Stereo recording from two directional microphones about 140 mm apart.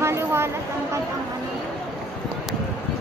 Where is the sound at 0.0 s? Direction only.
15° right (ahead or behind).